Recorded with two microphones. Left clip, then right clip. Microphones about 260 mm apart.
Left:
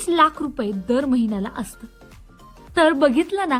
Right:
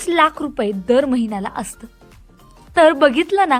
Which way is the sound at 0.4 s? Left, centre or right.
Centre.